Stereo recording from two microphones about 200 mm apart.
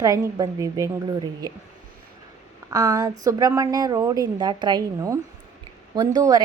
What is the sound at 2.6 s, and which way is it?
A woman's voice, 15° right (ahead or behind).